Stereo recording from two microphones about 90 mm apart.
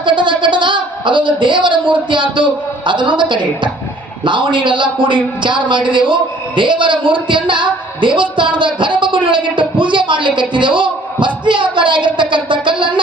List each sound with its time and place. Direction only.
0.0 s a woman's voice: 65° right (ahead or behind)